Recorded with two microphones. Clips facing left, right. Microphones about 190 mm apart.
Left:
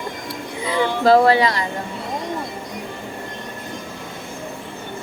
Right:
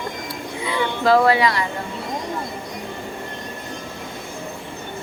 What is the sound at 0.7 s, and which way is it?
Speech, 30° left (ahead or behind).